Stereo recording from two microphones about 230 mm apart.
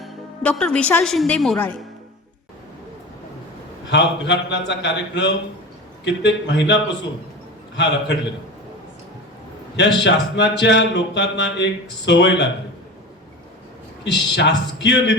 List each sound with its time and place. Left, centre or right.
0.0 s a woman's voice: centre
3.9 s speech: left
7.8 s speech: left
9.7 s speech: left
14.0 s speech: left